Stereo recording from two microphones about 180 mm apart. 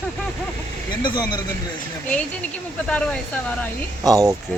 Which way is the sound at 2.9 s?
5° left (ahead or behind).